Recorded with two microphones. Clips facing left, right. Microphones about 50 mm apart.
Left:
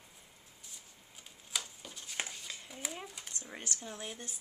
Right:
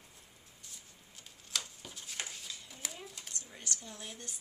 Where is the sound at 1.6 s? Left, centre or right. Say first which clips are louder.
Even; centre.